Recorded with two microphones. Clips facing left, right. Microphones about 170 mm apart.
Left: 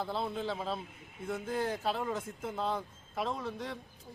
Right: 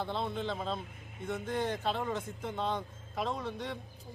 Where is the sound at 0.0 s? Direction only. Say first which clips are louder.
Even; 5° left (ahead or behind).